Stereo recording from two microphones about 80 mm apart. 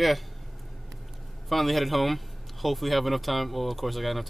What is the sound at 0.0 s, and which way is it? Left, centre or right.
A man's voice, centre.